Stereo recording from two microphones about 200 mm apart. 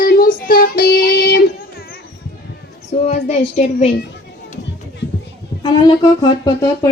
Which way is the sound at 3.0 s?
30° left (ahead or behind).